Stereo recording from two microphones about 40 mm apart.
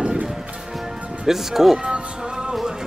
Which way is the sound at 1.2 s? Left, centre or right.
Centre.